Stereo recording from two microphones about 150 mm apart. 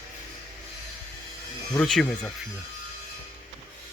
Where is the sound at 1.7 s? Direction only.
5° left (ahead or behind).